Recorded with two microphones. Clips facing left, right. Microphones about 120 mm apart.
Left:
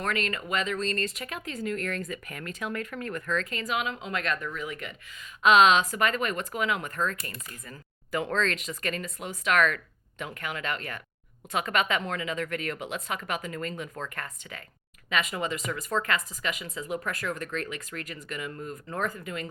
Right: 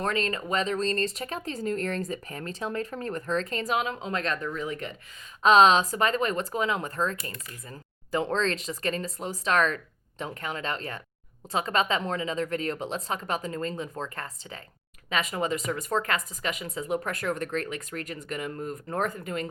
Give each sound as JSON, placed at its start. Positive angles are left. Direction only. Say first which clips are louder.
{"t": 0.0, "sound": "speech", "louder": "right 2 dB", "side_deg": -30}